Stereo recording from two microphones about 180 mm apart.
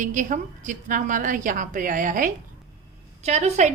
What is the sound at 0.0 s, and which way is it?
A woman's voice, 45° right (ahead or behind).